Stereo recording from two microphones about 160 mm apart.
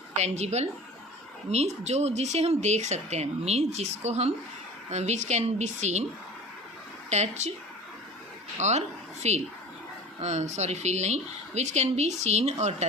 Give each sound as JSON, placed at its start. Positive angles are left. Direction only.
{"t": 0.2, "sound": "speech", "side_deg": -45}
{"t": 7.1, "sound": "speech", "side_deg": -45}
{"t": 8.5, "sound": "speech", "side_deg": -45}